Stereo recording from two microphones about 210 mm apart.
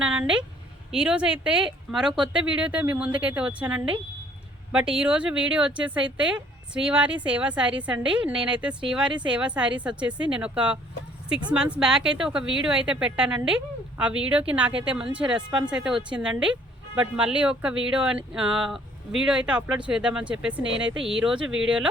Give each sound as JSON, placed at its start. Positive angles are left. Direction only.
{"t": 0.0, "sound": "speech", "side_deg": -5}
{"t": 11.8, "sound": "speech", "side_deg": -5}